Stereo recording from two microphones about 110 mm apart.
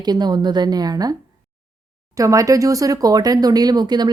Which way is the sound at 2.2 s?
30° right (ahead or behind).